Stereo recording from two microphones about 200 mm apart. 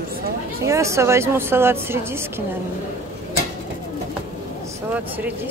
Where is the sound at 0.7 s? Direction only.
15° right (ahead or behind).